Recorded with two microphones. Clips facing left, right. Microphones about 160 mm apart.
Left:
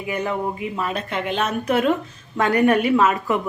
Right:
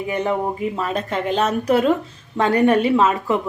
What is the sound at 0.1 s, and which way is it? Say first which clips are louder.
Speech: right 2 dB; 25° right (ahead or behind).